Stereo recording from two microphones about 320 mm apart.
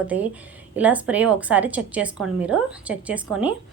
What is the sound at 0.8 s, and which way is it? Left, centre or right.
A woman's voice, centre.